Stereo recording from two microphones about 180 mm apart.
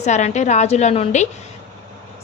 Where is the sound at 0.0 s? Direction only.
40° left (ahead or behind).